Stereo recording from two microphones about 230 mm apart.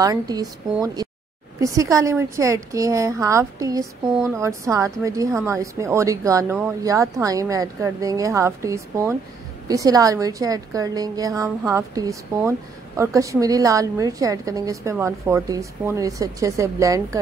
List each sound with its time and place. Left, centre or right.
0.0 s a woman's voice: centre